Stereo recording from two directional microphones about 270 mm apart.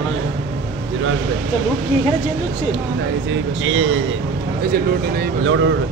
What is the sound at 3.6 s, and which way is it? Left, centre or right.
Speech, right.